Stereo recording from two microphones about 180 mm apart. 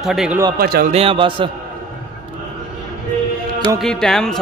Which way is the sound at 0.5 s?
55° right (ahead or behind).